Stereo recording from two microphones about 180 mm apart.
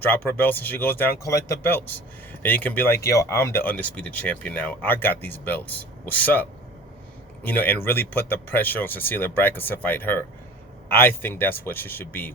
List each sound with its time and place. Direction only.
0.0 s speech: 10° left (ahead or behind)